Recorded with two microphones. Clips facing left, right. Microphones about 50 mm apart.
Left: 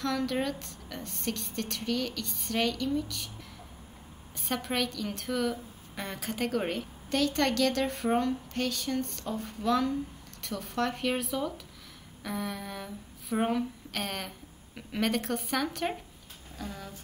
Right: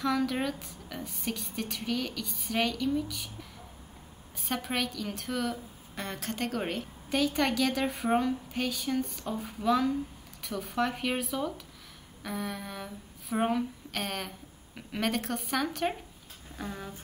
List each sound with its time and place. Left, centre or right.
0.0 s a woman's voice: centre
4.4 s a woman's voice: centre
7.1 s a woman's voice: centre
16.5 s speech: right